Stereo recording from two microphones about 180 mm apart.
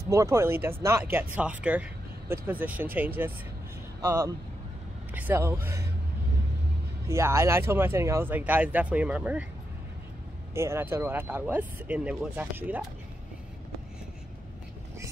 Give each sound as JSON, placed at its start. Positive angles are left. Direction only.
{"t": 0.1, "sound": "speech", "side_deg": -15}
{"t": 7.1, "sound": "speech", "side_deg": -15}
{"t": 10.5, "sound": "speech", "side_deg": -15}